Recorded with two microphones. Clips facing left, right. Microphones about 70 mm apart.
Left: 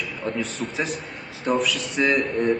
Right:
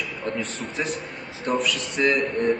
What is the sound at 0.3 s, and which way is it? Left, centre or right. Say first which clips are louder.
A man's voice: left 2 dB; centre.